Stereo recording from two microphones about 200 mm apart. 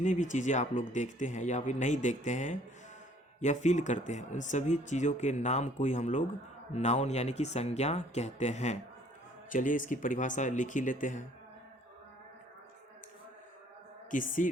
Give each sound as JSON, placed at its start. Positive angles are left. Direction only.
{"t": 0.0, "sound": "speech", "side_deg": 40}
{"t": 14.1, "sound": "speech", "side_deg": 40}